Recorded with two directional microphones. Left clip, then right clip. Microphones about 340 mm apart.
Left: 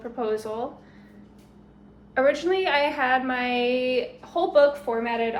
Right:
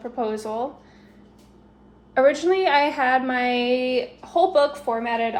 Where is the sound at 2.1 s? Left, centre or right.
Centre.